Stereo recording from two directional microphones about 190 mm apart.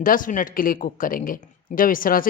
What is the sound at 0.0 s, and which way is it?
A woman's voice, 45° left (ahead or behind).